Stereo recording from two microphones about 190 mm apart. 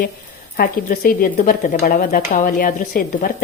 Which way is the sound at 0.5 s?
50° left (ahead or behind).